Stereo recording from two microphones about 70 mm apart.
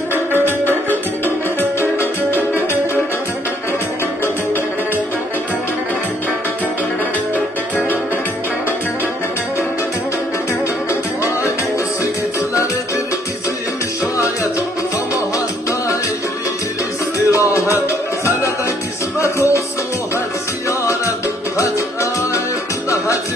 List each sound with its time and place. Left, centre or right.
0.1 s music: right
1.2 s music: left
12.4 s music: left
17.3 s music: left
20.6 s music: left